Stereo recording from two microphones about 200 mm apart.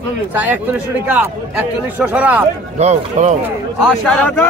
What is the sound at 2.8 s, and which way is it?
Speech, 35° right (ahead or behind).